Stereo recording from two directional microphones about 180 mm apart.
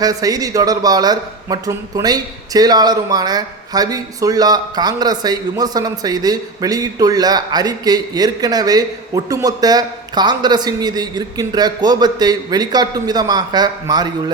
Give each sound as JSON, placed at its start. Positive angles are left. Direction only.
{"t": 0.0, "sound": "a man's voice", "side_deg": -20}